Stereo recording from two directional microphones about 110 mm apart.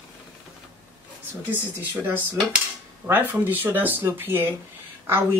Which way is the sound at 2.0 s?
15° right (ahead or behind).